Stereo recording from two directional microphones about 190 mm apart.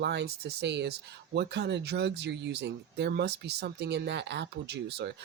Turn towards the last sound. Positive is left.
turn(degrees=-60)  # may be behind; listen again after turning